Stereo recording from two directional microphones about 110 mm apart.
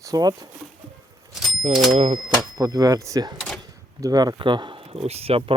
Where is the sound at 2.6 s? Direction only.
35° right (ahead or behind).